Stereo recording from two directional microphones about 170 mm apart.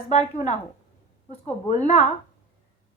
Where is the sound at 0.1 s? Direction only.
40° left (ahead or behind).